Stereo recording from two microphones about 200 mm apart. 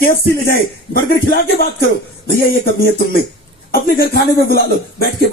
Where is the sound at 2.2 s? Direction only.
50° left (ahead or behind).